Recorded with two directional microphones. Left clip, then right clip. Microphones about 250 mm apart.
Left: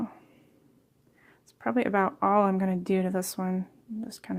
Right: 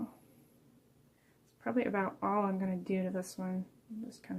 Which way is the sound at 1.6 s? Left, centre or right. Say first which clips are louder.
Left 8 dB; left.